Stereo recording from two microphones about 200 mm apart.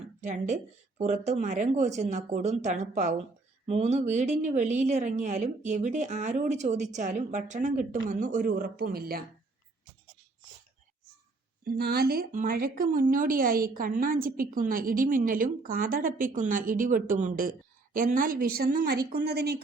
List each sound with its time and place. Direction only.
0.2 s a woman's voice: 35° right (ahead or behind)
11.6 s speech: 50° right (ahead or behind)